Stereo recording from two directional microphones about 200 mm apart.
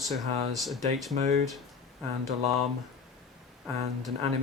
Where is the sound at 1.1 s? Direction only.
35° right (ahead or behind).